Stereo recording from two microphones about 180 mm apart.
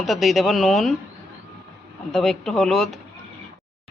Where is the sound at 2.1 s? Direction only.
Centre (ahead or behind).